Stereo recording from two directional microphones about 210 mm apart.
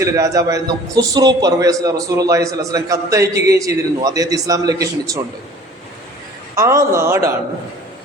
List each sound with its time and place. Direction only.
0.0 s a man's voice: 15° right (ahead or behind)
6.6 s a man's voice: 15° right (ahead or behind)